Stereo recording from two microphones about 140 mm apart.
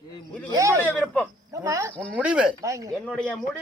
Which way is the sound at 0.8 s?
5° left (ahead or behind).